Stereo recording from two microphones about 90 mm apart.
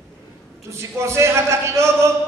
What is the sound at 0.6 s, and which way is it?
A man's voice, 30° right (ahead or behind).